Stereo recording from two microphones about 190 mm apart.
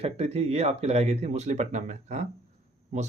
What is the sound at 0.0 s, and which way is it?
Speech, 30° right (ahead or behind).